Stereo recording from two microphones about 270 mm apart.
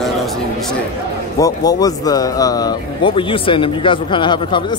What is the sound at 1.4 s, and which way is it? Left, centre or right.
Speech, centre.